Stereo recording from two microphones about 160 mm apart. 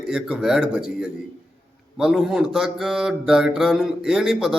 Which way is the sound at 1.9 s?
5° right (ahead or behind).